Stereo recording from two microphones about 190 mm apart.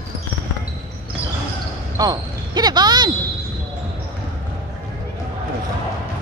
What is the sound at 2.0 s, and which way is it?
Speech, 20° right (ahead or behind).